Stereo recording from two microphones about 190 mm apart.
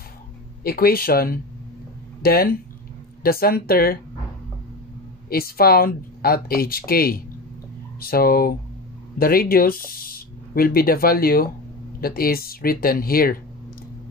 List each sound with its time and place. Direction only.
0.7 s speech: 50° left (ahead or behind)
5.3 s speech: 50° left (ahead or behind)